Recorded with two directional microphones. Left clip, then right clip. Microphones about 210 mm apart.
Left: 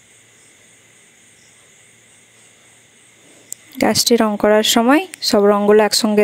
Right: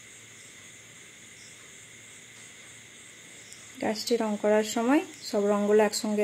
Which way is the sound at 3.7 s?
55° left (ahead or behind).